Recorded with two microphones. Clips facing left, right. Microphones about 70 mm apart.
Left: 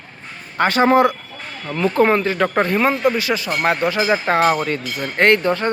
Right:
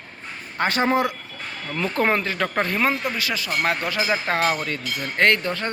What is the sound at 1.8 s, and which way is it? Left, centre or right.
Speech, centre.